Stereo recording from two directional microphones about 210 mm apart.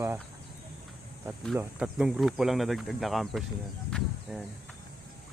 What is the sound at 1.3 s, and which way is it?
Speech, 5° right (ahead or behind).